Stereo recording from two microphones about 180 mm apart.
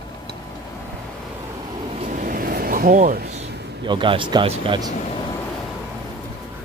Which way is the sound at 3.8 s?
25° right (ahead or behind).